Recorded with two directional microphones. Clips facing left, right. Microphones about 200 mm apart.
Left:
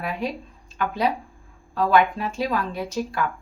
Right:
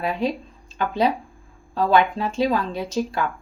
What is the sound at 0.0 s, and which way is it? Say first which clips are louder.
Speech: right 4 dB; 25° right (ahead or behind).